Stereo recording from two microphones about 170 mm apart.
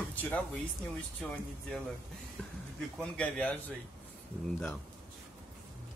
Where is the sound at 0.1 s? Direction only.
10° left (ahead or behind).